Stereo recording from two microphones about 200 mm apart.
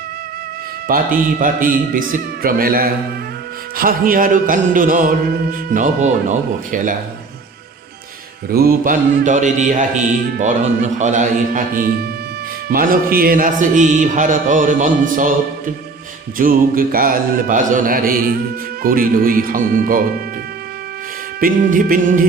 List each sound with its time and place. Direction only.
0.9 s a man's voice: 45° right (ahead or behind)
5.5 s music: 40° right (ahead or behind)
8.4 s music: 50° right (ahead or behind)
16.4 s a man's voice: 45° right (ahead or behind)
21.4 s a man's voice: 45° right (ahead or behind)